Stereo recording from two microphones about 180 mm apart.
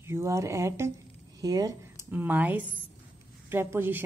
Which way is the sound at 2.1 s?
10° right (ahead or behind).